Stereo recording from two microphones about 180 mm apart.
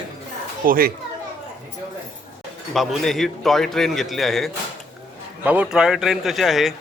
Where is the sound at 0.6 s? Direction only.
55° right (ahead or behind).